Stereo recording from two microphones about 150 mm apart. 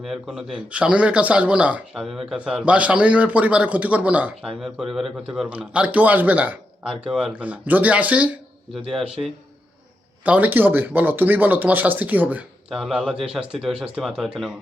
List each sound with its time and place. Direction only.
0.0 s speech: centre (ahead or behind)
10.2 s speech: 10° right (ahead or behind)